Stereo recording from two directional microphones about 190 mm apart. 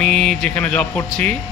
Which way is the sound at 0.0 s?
5° left (ahead or behind).